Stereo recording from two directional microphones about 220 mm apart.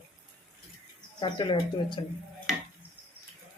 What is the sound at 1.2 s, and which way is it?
Speech, 20° left (ahead or behind).